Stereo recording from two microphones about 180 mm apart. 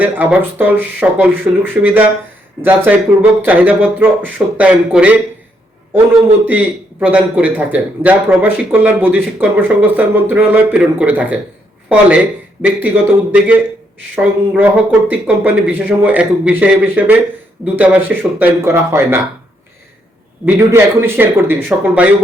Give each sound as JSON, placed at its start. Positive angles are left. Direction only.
{"t": 0.0, "sound": "speech", "side_deg": -10}
{"t": 6.4, "sound": "speech", "side_deg": -10}
{"t": 20.4, "sound": "speech", "side_deg": -15}